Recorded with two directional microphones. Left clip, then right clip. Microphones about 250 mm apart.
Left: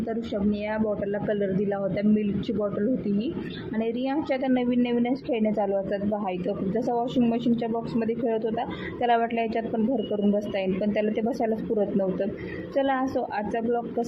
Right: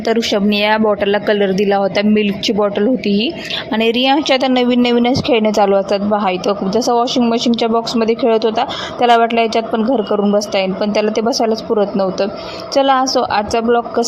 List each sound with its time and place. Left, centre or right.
0.1 s a woman's voice: right
3.8 s a woman's voice: right
12.7 s a woman's voice: right